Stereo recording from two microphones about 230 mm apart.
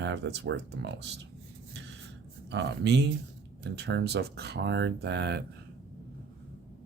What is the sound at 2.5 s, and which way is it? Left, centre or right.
Speech, right.